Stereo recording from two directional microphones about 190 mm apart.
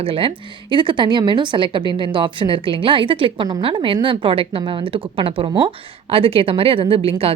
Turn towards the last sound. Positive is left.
turn(degrees=-30)  # may be behind; listen again after turning